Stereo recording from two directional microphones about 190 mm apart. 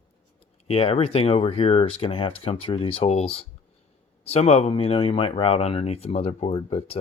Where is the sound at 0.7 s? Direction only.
30° left (ahead or behind).